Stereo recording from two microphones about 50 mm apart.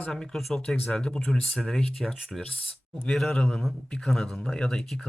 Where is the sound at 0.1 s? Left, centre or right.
Centre.